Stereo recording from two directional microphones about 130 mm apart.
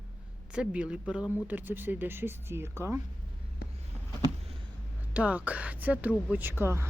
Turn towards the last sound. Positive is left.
turn(degrees=-20)  # may be behind; listen again after turning